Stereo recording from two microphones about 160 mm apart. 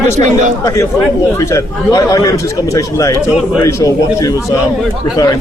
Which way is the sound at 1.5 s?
20° left (ahead or behind).